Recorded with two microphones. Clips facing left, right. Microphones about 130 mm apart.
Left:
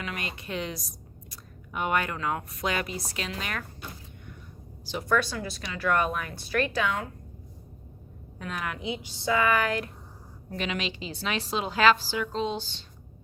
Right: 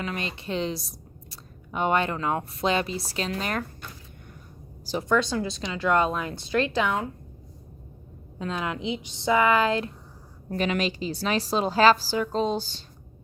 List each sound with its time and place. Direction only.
0.0 s speech: 30° right (ahead or behind)
5.0 s speech: 20° right (ahead or behind)
8.4 s speech: 25° right (ahead or behind)
10.5 s a woman's voice: 45° right (ahead or behind)